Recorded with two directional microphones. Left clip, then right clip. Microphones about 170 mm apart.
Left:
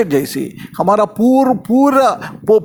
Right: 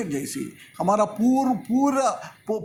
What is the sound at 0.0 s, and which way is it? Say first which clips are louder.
A man's voice: left 14 dB; 45° left (ahead or behind).